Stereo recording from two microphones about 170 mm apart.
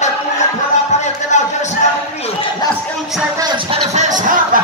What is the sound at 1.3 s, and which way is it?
Music, 45° left (ahead or behind).